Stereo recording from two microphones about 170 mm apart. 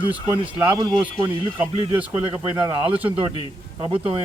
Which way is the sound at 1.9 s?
10° right (ahead or behind).